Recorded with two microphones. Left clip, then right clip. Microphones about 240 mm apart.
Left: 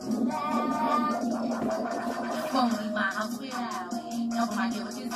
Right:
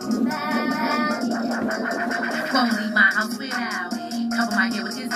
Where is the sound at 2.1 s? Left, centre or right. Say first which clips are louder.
Right 7 dB; right.